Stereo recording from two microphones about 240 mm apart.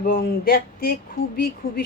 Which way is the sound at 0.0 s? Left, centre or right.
Left.